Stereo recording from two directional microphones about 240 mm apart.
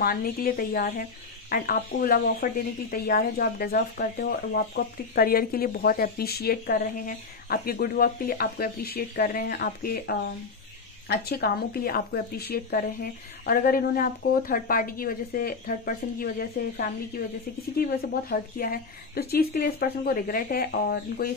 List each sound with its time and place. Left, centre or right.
0.0 s speech: left
18.3 s speech: left